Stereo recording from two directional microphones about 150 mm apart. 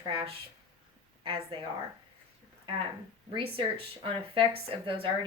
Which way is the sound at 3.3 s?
35° right (ahead or behind).